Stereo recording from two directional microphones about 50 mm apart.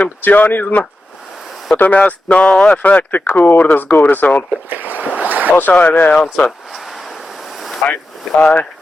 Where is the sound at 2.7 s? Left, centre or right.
Left.